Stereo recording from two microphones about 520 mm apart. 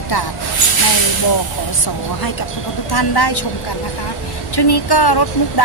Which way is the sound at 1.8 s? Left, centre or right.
Left.